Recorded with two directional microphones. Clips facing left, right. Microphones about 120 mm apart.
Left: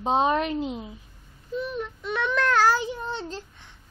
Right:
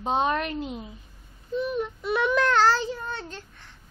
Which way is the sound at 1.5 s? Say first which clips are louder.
Right 3 dB; centre (ahead or behind).